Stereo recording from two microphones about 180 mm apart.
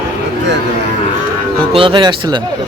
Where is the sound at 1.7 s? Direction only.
30° right (ahead or behind).